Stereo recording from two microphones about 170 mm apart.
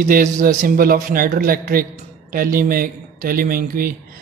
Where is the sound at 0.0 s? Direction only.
50° right (ahead or behind).